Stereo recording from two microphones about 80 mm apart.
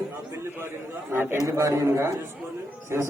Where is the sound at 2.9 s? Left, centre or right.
Right.